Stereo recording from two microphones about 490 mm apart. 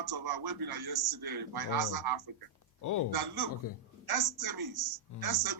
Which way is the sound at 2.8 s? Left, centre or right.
Left.